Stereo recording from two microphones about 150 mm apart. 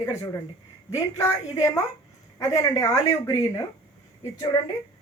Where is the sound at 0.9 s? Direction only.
20° left (ahead or behind).